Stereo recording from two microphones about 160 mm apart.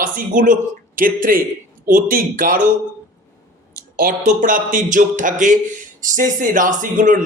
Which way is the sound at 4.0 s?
60° right (ahead or behind).